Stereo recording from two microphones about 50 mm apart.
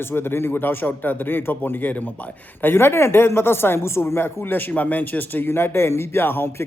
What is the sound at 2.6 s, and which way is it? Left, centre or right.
Speech, left.